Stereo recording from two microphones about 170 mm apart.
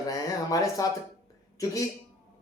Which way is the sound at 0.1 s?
20° left (ahead or behind).